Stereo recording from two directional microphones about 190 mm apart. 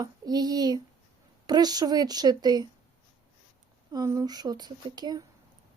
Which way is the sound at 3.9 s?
20° right (ahead or behind).